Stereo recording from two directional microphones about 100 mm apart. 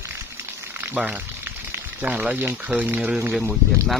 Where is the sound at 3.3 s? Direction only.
Centre (ahead or behind).